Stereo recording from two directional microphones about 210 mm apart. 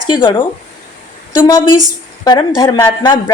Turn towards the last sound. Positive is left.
turn(degrees=20)  # may be behind; listen again after turning